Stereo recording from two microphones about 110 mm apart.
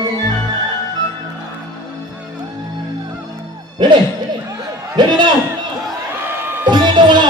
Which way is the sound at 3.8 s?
40° right (ahead or behind).